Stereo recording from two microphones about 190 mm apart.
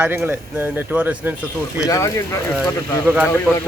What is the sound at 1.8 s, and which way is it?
Speech, 20° left (ahead or behind).